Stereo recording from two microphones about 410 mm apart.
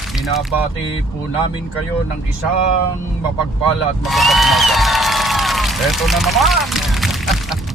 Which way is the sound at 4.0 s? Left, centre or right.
Centre.